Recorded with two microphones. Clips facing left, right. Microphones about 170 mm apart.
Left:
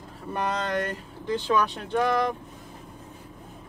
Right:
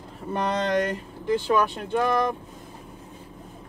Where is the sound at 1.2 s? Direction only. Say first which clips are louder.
Right 2 dB; 15° right (ahead or behind).